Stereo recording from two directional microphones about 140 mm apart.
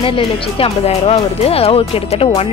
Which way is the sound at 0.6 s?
45° left (ahead or behind).